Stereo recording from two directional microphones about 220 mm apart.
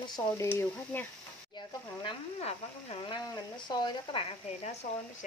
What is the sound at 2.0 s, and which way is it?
Speech, 25° left (ahead or behind).